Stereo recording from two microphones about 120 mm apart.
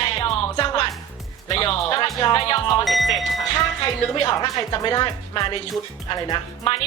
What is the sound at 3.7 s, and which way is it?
Speech, 40° left (ahead or behind).